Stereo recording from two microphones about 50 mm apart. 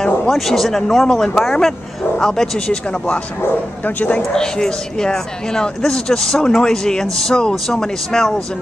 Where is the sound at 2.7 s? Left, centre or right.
Left.